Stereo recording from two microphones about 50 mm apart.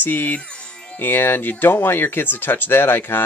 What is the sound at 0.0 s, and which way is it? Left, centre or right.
Speech, left.